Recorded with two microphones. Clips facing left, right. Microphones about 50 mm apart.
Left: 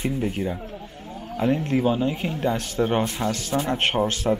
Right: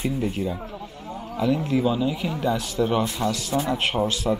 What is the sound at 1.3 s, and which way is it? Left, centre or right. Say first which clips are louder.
Speech: even; left.